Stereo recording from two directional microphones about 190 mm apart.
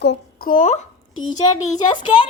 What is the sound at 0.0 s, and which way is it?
Speech, 60° left (ahead or behind).